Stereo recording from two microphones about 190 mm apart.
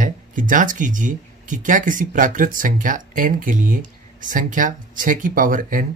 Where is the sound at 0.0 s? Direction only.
45° right (ahead or behind).